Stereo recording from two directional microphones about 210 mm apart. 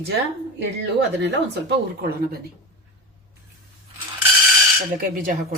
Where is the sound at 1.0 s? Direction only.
55° right (ahead or behind).